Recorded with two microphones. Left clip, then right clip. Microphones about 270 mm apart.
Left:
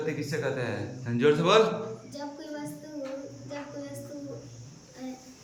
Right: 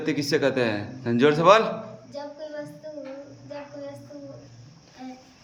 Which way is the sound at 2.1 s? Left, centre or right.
Centre.